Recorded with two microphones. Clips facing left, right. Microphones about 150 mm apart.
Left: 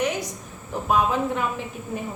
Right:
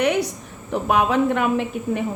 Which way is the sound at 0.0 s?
65° right (ahead or behind).